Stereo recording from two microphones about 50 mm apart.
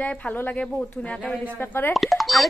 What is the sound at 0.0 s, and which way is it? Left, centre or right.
Speech, left.